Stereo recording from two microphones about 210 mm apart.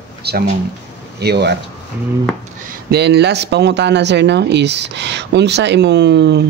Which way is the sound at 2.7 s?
50° right (ahead or behind).